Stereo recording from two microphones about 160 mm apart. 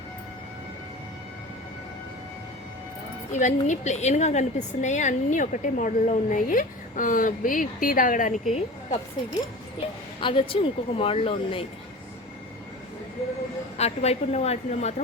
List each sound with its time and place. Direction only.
3.3 s a woman's voice: 50° left (ahead or behind)
10.2 s a woman's voice: 30° left (ahead or behind)
13.7 s a woman's voice: 40° left (ahead or behind)